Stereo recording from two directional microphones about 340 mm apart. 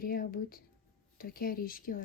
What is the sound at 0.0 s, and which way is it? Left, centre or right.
A woman's voice, left.